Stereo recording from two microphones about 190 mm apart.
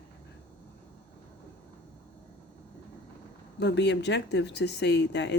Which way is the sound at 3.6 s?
65° left (ahead or behind).